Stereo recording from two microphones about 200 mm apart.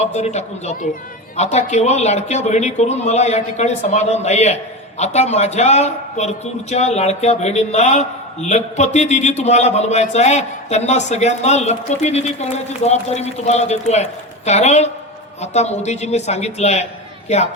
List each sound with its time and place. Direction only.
0.0 s a man's voice: 35° left (ahead or behind)